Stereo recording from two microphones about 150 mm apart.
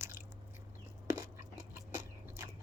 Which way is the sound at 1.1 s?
20° right (ahead or behind).